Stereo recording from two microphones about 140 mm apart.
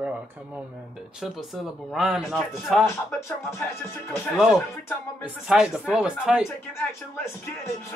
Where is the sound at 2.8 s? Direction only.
20° left (ahead or behind).